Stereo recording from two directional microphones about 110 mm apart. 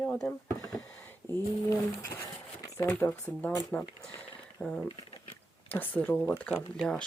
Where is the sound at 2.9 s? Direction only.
15° left (ahead or behind).